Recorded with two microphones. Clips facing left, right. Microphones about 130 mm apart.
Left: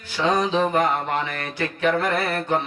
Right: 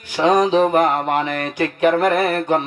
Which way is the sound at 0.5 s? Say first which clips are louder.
Right 5 dB; 50° right (ahead or behind).